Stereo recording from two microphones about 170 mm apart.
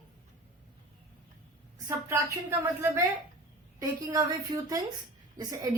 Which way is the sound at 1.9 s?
20° right (ahead or behind).